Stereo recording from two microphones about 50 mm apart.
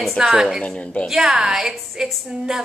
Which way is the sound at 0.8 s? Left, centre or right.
Left.